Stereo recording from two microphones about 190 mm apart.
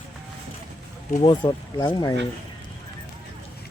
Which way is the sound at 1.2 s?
25° left (ahead or behind).